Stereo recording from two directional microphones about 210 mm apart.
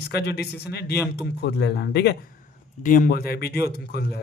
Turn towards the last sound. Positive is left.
turn(degrees=50)  # may be behind; listen again after turning